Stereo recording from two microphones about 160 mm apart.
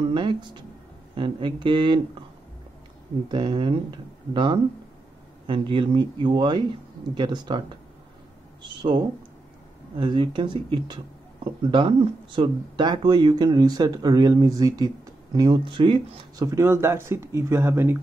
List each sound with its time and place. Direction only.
0.1 s speech: 30° right (ahead or behind)
3.3 s speech: 30° right (ahead or behind)
9.9 s speech: 30° right (ahead or behind); by 17.9 s 15° right (ahead or behind)